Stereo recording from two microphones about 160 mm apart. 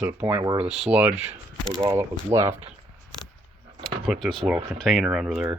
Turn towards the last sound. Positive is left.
turn(degrees=0)  # may be behind; listen again after turning